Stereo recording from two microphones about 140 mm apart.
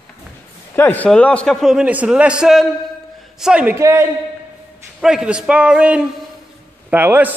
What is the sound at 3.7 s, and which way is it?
Speech, 20° right (ahead or behind).